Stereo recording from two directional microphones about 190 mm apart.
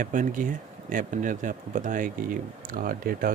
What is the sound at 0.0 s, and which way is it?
Speech, 45° right (ahead or behind).